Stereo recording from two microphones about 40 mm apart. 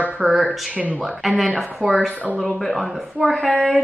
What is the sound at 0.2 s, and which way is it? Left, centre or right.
Speech, centre.